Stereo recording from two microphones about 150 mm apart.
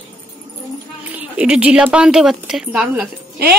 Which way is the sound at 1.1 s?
10° right (ahead or behind).